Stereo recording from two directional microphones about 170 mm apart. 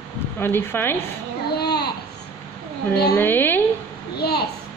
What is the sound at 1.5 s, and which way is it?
Babbling, 70° left (ahead or behind).